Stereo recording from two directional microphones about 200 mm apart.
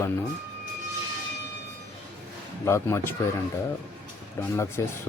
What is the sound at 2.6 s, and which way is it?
Speech, 15° left (ahead or behind).